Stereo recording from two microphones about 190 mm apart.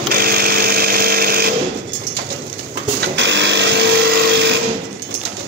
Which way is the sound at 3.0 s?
70° right (ahead or behind).